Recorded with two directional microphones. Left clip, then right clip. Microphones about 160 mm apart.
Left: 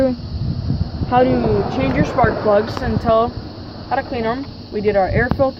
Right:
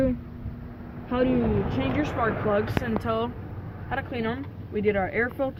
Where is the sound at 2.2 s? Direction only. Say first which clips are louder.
Left 11 dB; 15° left (ahead or behind).